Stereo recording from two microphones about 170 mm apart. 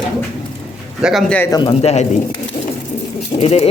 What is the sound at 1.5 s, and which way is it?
Speech, 30° left (ahead or behind).